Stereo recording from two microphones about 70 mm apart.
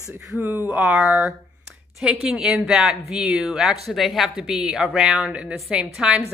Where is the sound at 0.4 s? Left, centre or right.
Right; by 5.3 s centre.